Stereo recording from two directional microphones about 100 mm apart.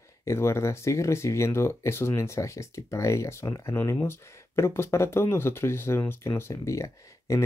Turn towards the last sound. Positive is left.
turn(degrees=30)  # may be behind; listen again after turning